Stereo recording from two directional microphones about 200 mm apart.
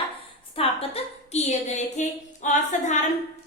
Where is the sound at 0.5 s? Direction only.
30° left (ahead or behind).